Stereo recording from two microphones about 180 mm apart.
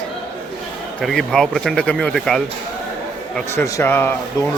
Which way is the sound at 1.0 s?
Centre (ahead or behind).